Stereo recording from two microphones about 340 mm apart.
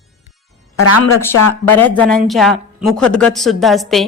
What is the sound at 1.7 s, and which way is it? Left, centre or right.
A man's voice, centre.